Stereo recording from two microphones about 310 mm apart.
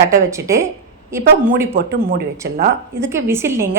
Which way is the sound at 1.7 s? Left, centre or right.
Right.